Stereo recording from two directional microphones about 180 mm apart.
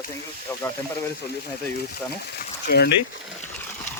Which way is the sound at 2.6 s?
60° left (ahead or behind).